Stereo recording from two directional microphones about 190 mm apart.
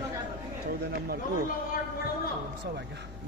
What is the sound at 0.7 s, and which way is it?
Speech, 55° right (ahead or behind).